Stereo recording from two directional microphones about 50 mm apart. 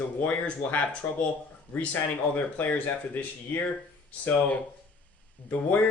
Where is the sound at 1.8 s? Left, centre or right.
Left.